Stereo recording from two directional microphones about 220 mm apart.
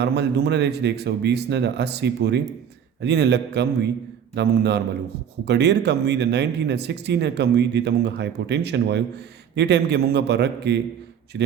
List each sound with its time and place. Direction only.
0.0 s speech: 50° right (ahead or behind)